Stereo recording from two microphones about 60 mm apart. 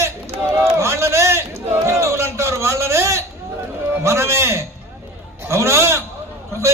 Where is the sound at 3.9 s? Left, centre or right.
Right.